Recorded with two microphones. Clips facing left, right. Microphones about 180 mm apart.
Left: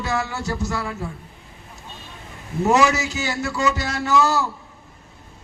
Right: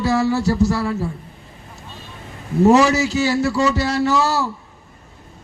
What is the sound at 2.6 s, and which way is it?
A man's voice, 35° right (ahead or behind).